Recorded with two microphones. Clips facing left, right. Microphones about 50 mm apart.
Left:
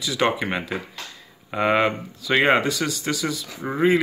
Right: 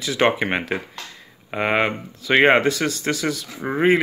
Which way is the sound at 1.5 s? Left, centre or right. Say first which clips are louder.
Left 1 dB; right.